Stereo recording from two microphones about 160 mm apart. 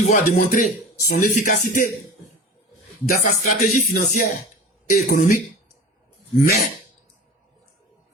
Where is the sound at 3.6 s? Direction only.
60° left (ahead or behind).